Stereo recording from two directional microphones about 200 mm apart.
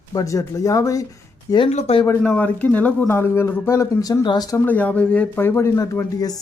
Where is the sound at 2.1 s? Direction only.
10° left (ahead or behind).